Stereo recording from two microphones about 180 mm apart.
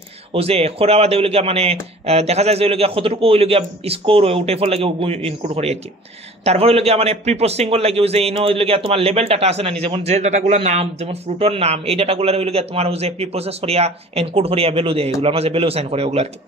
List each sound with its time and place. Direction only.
0.3 s a man's voice: 35° right (ahead or behind)